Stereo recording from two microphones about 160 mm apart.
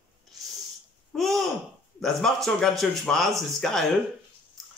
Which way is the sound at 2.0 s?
5° left (ahead or behind).